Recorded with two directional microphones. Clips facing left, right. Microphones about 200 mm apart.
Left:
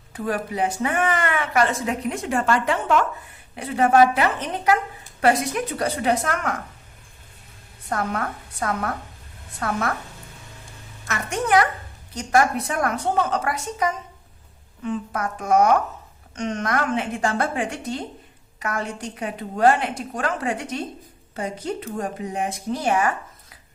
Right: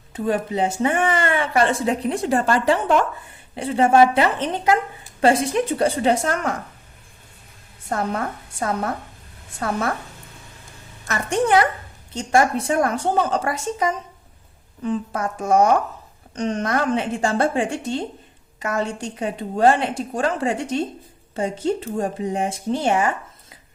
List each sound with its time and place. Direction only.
0.1 s speech: 25° right (ahead or behind)
7.9 s speech: 25° right (ahead or behind)
11.0 s a woman's voice: 35° right (ahead or behind)